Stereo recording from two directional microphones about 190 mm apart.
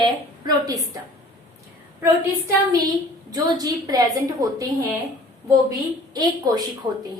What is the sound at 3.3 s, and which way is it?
A woman's voice, 20° right (ahead or behind).